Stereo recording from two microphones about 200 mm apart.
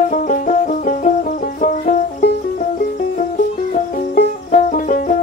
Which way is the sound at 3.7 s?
45° left (ahead or behind).